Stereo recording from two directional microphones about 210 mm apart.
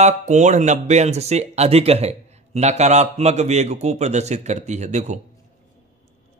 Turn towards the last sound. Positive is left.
turn(degrees=-35)  # may be behind; listen again after turning